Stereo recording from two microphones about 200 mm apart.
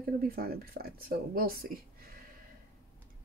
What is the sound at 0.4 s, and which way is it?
Speech, 50° right (ahead or behind).